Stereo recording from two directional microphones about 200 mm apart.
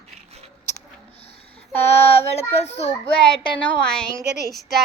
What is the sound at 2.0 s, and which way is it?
Child singing, 30° left (ahead or behind).